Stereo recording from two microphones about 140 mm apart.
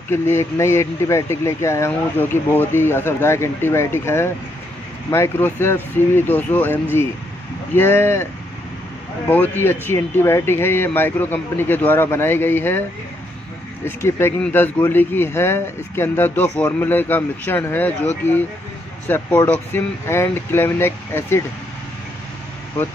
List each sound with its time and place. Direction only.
0.1 s speech: 15° left (ahead or behind)
9.3 s speech: 15° left (ahead or behind)
13.8 s speech: 15° left (ahead or behind)
19.0 s speech: 15° left (ahead or behind)